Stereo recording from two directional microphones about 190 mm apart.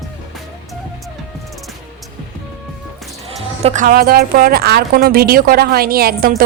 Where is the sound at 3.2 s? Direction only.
35° right (ahead or behind).